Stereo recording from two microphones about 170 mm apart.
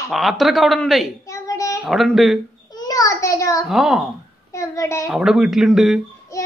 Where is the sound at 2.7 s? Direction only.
20° left (ahead or behind).